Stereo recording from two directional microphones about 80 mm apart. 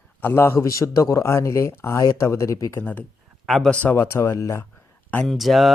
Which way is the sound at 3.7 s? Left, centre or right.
Centre.